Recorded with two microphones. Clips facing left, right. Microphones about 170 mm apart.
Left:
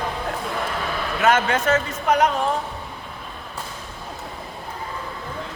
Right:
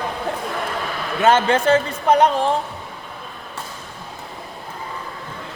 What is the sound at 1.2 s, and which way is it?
A man's voice, 30° right (ahead or behind).